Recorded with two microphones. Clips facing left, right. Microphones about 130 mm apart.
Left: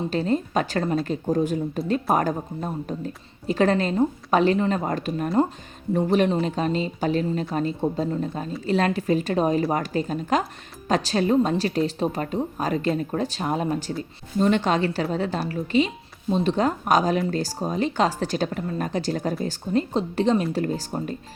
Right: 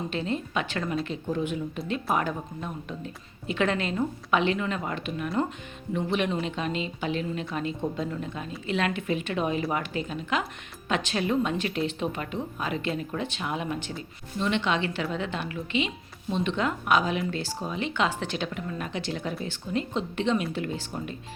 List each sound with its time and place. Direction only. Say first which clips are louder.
0.1 s speech: left 6 dB; 40° left (ahead or behind)